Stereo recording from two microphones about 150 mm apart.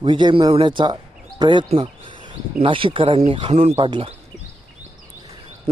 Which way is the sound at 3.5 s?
50° right (ahead or behind).